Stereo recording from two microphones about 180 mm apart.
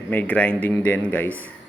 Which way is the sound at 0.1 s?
10° left (ahead or behind).